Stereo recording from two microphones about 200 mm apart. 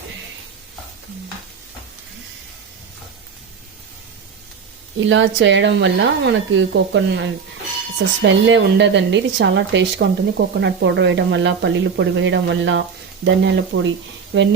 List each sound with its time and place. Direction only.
4.9 s a woman's voice: 70° right (ahead or behind)